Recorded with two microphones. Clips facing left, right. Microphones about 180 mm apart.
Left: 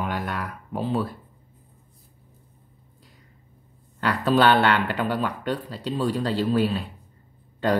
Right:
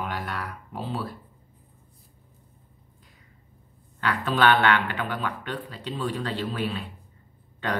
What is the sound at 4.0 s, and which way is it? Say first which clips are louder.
Speech: left 4 dB; 40° left (ahead or behind).